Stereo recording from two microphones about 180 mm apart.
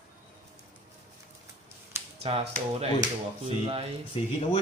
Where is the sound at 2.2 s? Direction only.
35° right (ahead or behind).